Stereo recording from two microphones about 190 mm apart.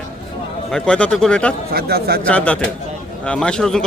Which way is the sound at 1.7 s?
55° right (ahead or behind).